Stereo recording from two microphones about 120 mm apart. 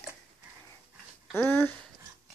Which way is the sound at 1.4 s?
15° left (ahead or behind).